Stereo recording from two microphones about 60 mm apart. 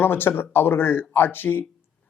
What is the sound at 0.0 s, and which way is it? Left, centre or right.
Speech, left.